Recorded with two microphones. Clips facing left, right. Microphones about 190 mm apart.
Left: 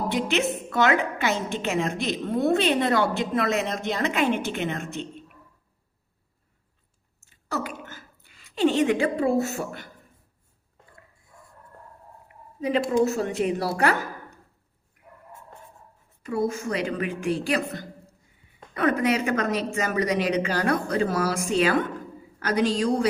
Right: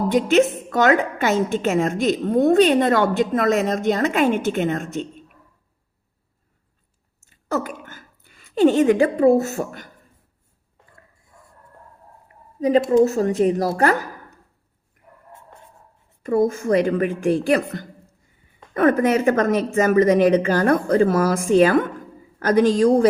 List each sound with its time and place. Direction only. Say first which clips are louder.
0.3 s a woman's voice: right 8 dB; 45° right (ahead or behind)
7.4 s a woman's voice: right 6 dB; 50° right (ahead or behind)
12.5 s a woman's voice: right 7 dB; 40° right (ahead or behind)
16.2 s a woman's voice: right 7 dB; 50° right (ahead or behind)